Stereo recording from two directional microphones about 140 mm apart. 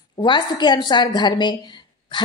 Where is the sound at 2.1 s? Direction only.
30° left (ahead or behind).